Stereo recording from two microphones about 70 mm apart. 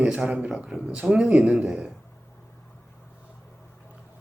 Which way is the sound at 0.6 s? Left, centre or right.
Centre.